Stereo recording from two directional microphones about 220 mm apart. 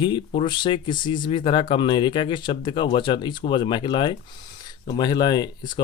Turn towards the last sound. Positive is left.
turn(degrees=20)  # may be behind; listen again after turning